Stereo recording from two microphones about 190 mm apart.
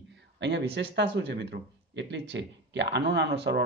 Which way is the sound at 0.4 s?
65° right (ahead or behind).